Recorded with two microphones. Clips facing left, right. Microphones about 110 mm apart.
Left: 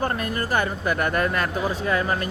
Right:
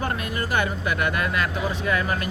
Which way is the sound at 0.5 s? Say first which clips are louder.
Left 1 dB; 40° left (ahead or behind).